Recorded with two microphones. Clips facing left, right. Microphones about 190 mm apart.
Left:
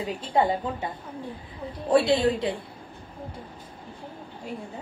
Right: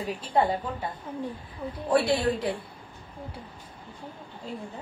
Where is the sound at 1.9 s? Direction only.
25° left (ahead or behind).